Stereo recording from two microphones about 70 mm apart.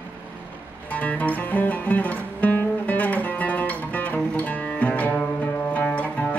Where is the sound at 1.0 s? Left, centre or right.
Left.